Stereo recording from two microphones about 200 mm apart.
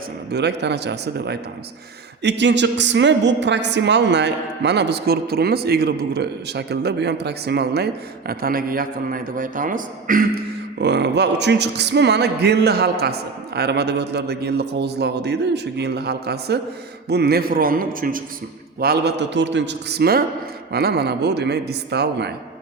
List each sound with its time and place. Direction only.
0.3 s a woman's voice: 60° right (ahead or behind)